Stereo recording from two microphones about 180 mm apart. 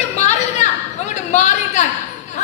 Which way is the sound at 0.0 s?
40° left (ahead or behind).